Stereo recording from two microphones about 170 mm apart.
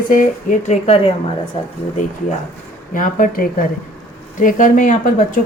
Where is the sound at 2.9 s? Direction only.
55° left (ahead or behind).